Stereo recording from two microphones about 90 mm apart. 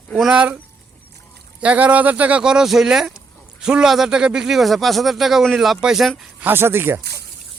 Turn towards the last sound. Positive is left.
turn(degrees=-25)  # may be behind; listen again after turning